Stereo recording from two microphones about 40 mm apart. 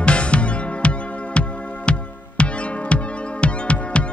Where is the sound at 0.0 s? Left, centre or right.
Left.